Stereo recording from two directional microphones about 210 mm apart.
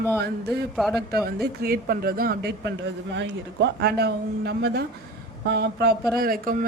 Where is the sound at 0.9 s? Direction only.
50° right (ahead or behind).